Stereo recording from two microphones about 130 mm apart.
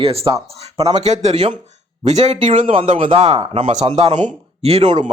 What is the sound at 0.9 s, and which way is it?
Speech, 60° right (ahead or behind).